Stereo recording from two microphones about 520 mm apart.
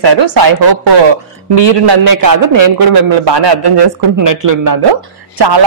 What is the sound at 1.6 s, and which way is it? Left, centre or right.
Speech, right.